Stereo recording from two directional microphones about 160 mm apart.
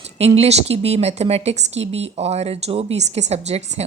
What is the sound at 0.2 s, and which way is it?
A woman's voice, 40° right (ahead or behind).